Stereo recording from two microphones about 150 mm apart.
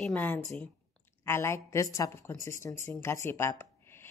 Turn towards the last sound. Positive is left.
turn(degrees=15)  # may be behind; listen again after turning